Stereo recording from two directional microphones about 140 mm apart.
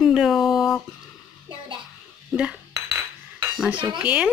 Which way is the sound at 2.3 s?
10° right (ahead or behind).